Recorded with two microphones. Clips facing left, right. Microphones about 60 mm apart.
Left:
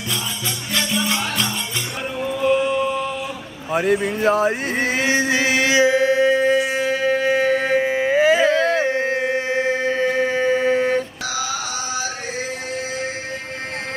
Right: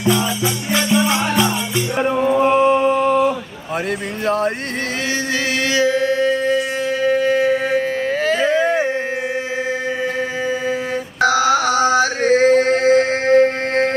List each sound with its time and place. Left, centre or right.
0.9 s music: centre
2.1 s mantra: right
3.7 s speech: centre
5.1 s music: centre
7.7 s a sound: centre
8.5 s a sound: centre
10.4 s mantra: centre
11.2 s chant: right